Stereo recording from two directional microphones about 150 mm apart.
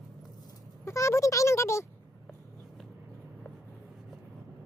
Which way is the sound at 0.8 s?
20° left (ahead or behind).